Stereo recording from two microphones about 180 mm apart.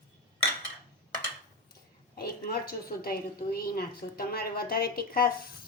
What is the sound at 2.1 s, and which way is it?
A woman's voice, 55° left (ahead or behind).